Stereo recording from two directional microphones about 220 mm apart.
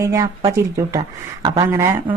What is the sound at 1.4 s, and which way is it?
Speech, 15° right (ahead or behind).